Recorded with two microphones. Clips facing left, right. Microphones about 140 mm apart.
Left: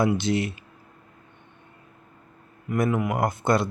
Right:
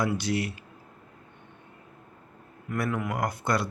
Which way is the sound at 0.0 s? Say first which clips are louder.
Left 5 dB; 25° left (ahead or behind).